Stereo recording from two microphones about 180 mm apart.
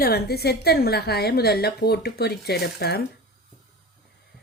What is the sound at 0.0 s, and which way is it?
A woman's voice, 60° left (ahead or behind).